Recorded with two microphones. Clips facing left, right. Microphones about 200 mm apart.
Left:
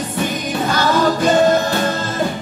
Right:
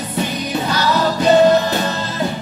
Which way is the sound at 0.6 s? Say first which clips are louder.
Left 3 dB; 50° left (ahead or behind).